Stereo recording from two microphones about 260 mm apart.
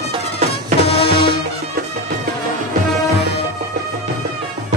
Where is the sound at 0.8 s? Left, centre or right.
Left.